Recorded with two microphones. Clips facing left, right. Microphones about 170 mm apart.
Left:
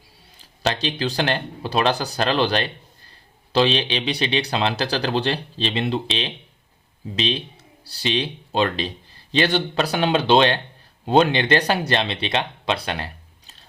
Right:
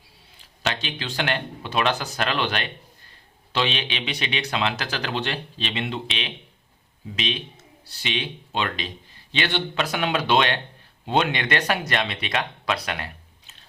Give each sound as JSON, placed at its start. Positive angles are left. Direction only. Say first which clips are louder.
{"t": 0.6, "sound": "speech", "louder": "left 6 dB", "side_deg": 35}